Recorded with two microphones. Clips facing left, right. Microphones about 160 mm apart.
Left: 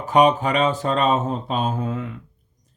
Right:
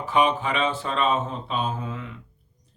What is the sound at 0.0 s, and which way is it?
Speech, 40° left (ahead or behind).